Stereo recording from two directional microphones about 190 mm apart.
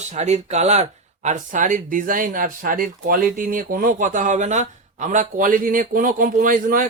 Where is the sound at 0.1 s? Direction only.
35° right (ahead or behind).